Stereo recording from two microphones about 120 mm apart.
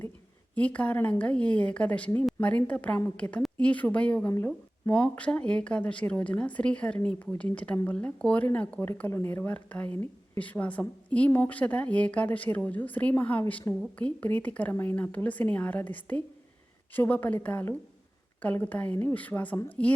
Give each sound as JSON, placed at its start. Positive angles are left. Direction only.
{"t": 0.5, "sound": "speech", "side_deg": 10}